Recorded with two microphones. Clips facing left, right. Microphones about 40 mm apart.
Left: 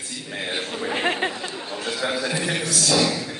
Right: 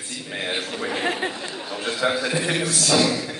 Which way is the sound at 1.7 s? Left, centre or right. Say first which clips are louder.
Right 3 dB; centre.